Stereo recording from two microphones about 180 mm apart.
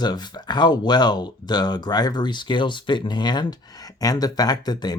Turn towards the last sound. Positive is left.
turn(degrees=20)  # may be behind; listen again after turning